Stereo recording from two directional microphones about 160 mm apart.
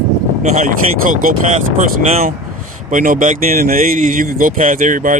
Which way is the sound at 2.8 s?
55° right (ahead or behind).